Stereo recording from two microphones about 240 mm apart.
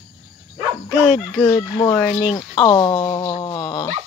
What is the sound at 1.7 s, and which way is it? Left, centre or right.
Speech, centre.